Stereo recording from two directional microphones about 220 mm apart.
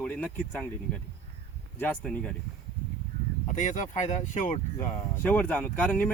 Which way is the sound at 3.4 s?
35° left (ahead or behind).